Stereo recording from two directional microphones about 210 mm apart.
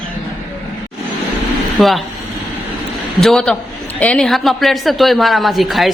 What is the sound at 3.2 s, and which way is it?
Speech, centre (ahead or behind).